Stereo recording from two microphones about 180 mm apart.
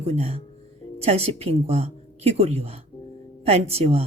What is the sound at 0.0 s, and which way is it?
Speech, 35° right (ahead or behind).